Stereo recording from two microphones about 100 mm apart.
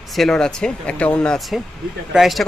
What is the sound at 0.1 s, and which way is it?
Speech, 5° left (ahead or behind).